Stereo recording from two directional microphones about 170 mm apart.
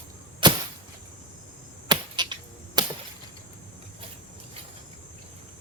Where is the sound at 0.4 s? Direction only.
30° right (ahead or behind).